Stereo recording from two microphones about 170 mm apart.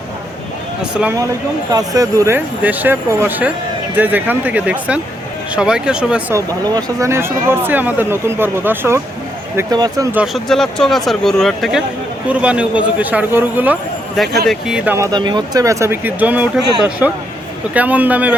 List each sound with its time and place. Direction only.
0.8 s a man's voice: 5° right (ahead or behind)
1.7 s a man's voice: 20° right (ahead or behind)
6.3 s speech: 20° right (ahead or behind)
10.2 s a man's voice: centre (ahead or behind)
14.9 s speech: 20° right (ahead or behind)
17.7 s speech: 10° right (ahead or behind)